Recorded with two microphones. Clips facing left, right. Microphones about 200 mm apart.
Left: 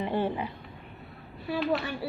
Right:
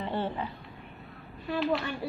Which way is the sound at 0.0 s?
15° left (ahead or behind).